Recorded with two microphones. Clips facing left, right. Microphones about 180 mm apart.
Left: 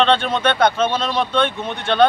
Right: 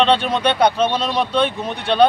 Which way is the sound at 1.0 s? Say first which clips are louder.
Right 1 dB; 35° right (ahead or behind).